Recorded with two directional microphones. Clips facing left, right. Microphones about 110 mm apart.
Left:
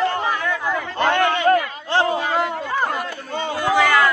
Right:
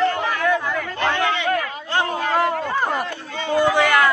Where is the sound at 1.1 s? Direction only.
50° left (ahead or behind).